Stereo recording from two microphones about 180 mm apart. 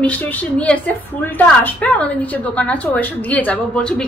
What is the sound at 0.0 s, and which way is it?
A woman's voice, 10° left (ahead or behind).